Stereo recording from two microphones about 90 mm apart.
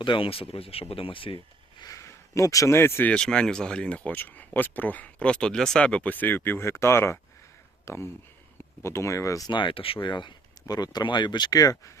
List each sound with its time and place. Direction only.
0.0 s speech: 75° left (ahead or behind)
1.8 s speech: 35° left (ahead or behind)
3.1 s speech: 10° left (ahead or behind); by 9.5 s 35° left (ahead or behind)
9.5 s speech: 65° left (ahead or behind); by 11.9 s 40° left (ahead or behind)